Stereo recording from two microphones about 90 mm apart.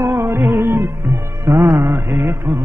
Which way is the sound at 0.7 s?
40° right (ahead or behind).